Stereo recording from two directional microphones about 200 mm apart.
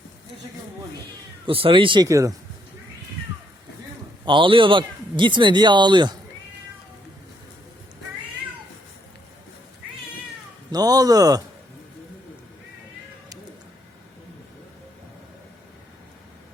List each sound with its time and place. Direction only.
1.5 s speech: 25° right (ahead or behind)
4.3 s speech: 25° right (ahead or behind)
10.7 s speech: 20° right (ahead or behind)